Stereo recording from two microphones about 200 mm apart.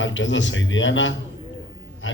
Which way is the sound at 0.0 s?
70° left (ahead or behind).